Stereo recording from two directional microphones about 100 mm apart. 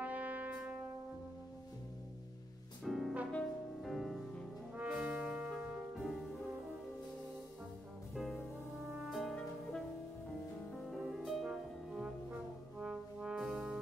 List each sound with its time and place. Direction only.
0.0 s music: 15° right (ahead or behind)
2.8 s music: centre (ahead or behind)
4.7 s brass instrument: 15° right (ahead or behind)
5.9 s music: centre (ahead or behind)
8.1 s music: centre (ahead or behind)
12.8 s brass instrument: 10° right (ahead or behind)